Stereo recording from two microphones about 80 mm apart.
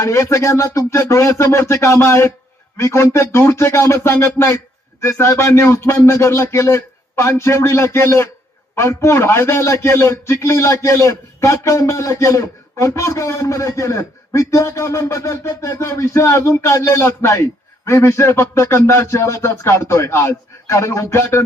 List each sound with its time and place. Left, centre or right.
0.0 s a man's voice: left